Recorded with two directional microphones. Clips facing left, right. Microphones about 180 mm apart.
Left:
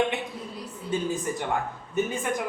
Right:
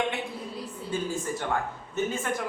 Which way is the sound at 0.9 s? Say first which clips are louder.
Left 3 dB; 20° left (ahead or behind).